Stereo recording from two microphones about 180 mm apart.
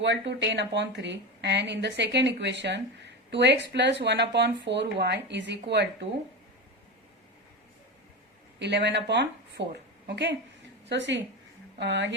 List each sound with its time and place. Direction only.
0.0 s a woman's voice: 75° right (ahead or behind)
8.5 s a woman's voice: 70° right (ahead or behind)